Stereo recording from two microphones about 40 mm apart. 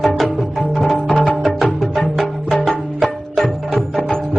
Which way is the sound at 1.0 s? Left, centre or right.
Left.